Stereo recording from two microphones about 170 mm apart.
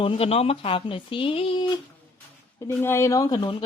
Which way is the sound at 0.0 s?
35° left (ahead or behind).